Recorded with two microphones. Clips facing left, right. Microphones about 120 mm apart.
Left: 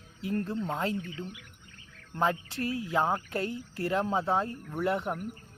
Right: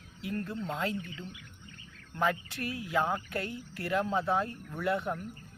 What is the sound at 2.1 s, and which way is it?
Speech, 30° left (ahead or behind).